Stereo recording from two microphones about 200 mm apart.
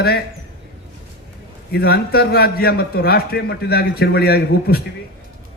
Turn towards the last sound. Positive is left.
turn(degrees=50)  # may be behind; listen again after turning